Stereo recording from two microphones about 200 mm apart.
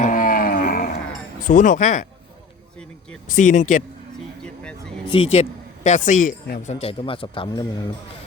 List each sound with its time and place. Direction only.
0.0 s a sound: 45° left (ahead or behind)
1.5 s speech: 40° left (ahead or behind)
3.2 s speech: 40° left (ahead or behind)
4.4 s speech: 5° left (ahead or behind)
5.0 s a man's voice: 25° left (ahead or behind)